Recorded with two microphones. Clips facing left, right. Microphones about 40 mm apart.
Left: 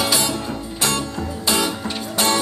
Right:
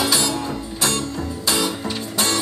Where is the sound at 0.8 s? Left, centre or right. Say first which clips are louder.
Left 1 dB; left.